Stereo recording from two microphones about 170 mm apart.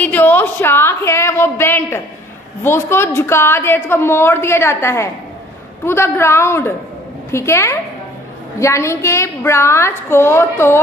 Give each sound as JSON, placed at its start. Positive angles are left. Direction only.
{"t": 0.0, "sound": "a woman's voice", "side_deg": 10}